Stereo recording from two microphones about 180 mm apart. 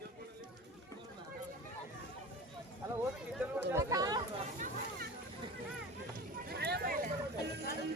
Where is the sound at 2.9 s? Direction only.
15° right (ahead or behind).